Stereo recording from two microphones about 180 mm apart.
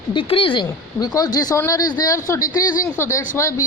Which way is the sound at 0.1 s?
30° left (ahead or behind).